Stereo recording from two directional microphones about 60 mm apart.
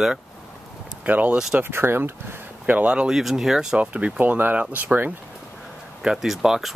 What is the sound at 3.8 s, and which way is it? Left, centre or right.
Speech, right.